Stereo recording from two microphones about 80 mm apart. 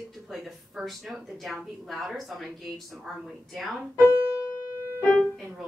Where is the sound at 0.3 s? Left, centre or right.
Centre.